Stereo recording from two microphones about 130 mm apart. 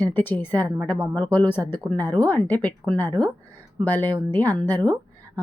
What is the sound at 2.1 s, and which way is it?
Speech, 30° right (ahead or behind).